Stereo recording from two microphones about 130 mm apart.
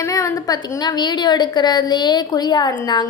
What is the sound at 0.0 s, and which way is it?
A woman's voice, 25° left (ahead or behind).